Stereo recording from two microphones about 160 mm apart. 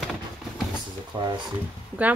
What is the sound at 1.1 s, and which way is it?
Speech, 25° right (ahead or behind).